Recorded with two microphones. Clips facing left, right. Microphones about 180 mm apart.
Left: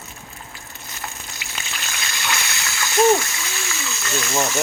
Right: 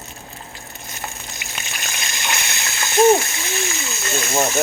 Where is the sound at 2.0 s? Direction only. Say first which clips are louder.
Even; 20° right (ahead or behind).